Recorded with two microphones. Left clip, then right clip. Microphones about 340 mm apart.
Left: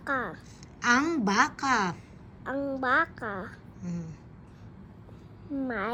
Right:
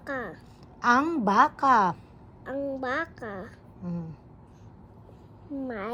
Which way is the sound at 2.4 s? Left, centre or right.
Centre.